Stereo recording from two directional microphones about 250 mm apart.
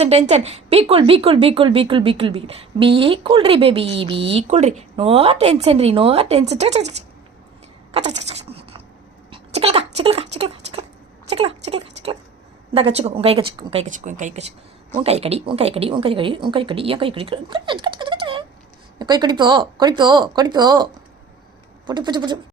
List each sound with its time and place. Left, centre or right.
0.0 s a woman's voice: right
7.9 s a sound: right
11.3 s a woman's voice: right
21.8 s speech: centre